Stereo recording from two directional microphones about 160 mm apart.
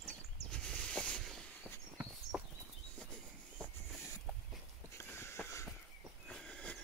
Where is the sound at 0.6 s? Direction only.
5° left (ahead or behind).